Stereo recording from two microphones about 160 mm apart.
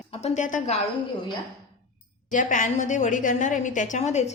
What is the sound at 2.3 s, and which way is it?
A woman's voice, 55° left (ahead or behind).